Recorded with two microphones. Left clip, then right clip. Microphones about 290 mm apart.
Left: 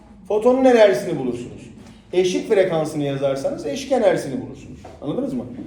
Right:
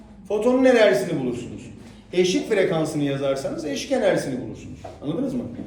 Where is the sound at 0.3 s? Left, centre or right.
Centre.